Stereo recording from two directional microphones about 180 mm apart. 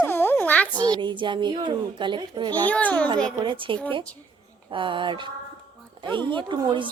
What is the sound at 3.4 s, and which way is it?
Speech, 25° right (ahead or behind).